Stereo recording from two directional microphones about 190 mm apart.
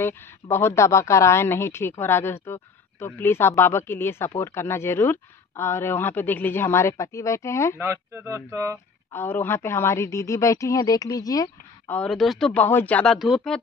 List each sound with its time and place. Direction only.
0.0 s a woman's voice: 15° left (ahead or behind)
7.8 s speech: 10° right (ahead or behind)
9.1 s a woman's voice: 10° left (ahead or behind)
11.9 s speech: centre (ahead or behind)